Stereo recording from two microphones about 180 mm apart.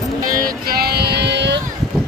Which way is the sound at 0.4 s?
55° right (ahead or behind).